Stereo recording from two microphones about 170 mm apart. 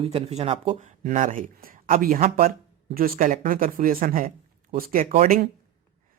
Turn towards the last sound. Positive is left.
turn(degrees=-40)  # may be behind; listen again after turning